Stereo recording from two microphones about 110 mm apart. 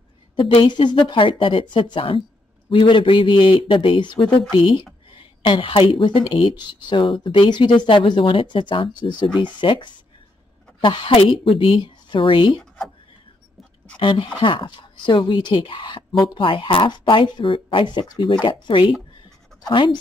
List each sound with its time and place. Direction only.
0.4 s speech: 50° left (ahead or behind)
13.9 s speech: 45° left (ahead or behind)
18.4 s speech: 50° left (ahead or behind)